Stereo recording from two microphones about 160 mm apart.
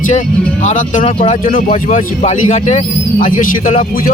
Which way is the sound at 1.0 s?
35° left (ahead or behind).